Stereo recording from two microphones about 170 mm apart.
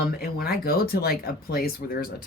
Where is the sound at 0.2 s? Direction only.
60° left (ahead or behind).